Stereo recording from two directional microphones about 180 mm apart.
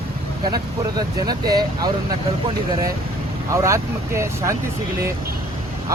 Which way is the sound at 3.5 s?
15° right (ahead or behind).